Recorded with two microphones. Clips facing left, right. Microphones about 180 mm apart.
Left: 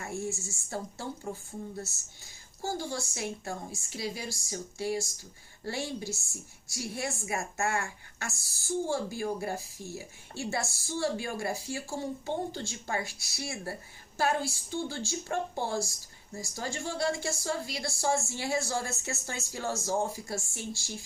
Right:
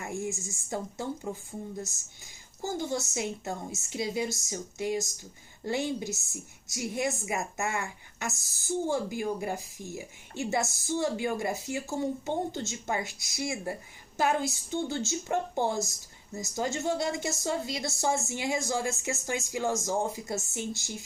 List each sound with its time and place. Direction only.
0.0 s a woman's voice: 15° right (ahead or behind)